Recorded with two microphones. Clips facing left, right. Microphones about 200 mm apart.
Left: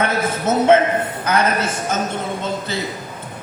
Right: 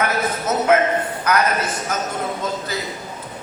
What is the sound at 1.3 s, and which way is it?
Speech, 25° left (ahead or behind).